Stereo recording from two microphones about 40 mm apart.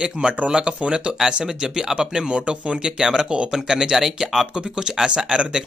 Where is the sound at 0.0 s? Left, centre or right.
Right.